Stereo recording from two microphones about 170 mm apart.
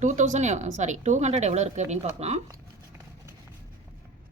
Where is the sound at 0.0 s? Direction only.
45° right (ahead or behind).